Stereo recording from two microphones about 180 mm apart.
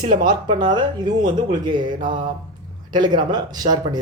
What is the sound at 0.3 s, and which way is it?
Speech, 25° right (ahead or behind).